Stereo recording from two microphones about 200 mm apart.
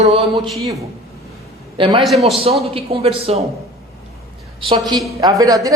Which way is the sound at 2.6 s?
30° right (ahead or behind).